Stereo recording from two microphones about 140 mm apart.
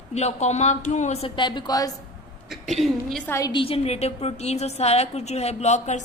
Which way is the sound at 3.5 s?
40° left (ahead or behind).